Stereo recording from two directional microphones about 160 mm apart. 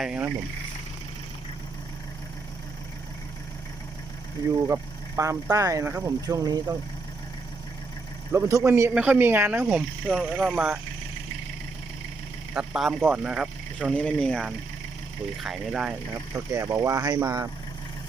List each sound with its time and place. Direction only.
0.0 s speech: 5° right (ahead or behind)
4.7 s speech: 15° right (ahead or behind)
8.3 s speech: 20° right (ahead or behind)
12.5 s speech: centre (ahead or behind)
13.9 s speech: 5° left (ahead or behind)
16.3 s speech: 20° right (ahead or behind)